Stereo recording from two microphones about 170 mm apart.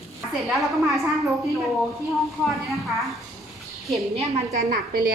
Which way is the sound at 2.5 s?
Centre (ahead or behind).